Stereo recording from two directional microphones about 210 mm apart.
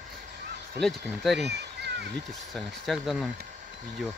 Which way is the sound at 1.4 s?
50° right (ahead or behind).